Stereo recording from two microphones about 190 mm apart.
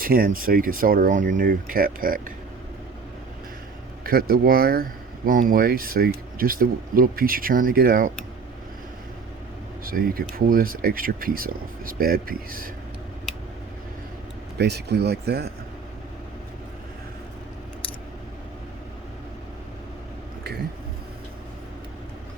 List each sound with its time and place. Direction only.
0.0 s speech: 50° right (ahead or behind)
4.0 s speech: 50° right (ahead or behind)
9.8 s speech: 50° right (ahead or behind)
14.6 s speech: 60° right (ahead or behind)